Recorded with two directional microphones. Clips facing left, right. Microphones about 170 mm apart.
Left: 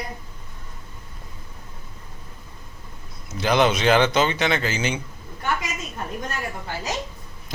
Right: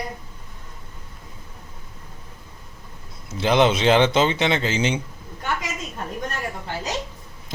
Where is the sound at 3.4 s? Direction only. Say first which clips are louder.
Right 1 dB; 25° right (ahead or behind).